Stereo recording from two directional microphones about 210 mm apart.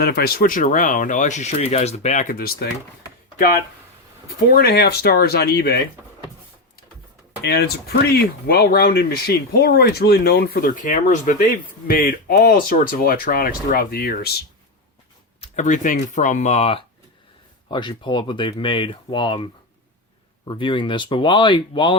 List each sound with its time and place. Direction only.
0.0 s speech: 50° left (ahead or behind)
4.5 s speech: 45° left (ahead or behind)
7.4 s speech: 50° left (ahead or behind)
15.4 s speech: 35° left (ahead or behind)